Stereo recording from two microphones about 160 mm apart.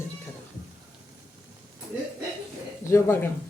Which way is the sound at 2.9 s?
15° left (ahead or behind).